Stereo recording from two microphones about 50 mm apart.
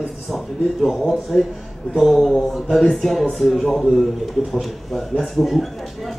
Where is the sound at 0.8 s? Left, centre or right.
Centre.